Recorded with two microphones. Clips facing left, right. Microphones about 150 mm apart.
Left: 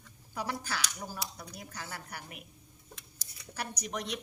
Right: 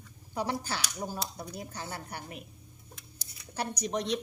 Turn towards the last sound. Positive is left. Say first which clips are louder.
# right 6 dB
turn(degrees=-30)  # may be behind; listen again after turning